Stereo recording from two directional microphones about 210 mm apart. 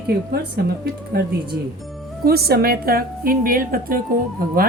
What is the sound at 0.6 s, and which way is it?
A woman's voice, 50° right (ahead or behind).